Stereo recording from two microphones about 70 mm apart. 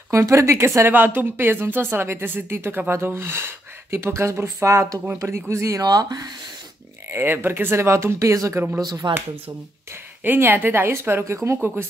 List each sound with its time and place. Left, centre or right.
0.1 s speech: right
0.9 s speech: right
5.8 s speech: right
7.1 s speech: right
8.7 s speech: right
10.2 s speech: right